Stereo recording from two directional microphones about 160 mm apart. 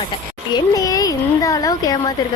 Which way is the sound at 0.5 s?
20° left (ahead or behind).